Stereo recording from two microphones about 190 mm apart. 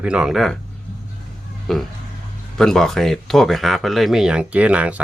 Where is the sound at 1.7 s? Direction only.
Centre (ahead or behind).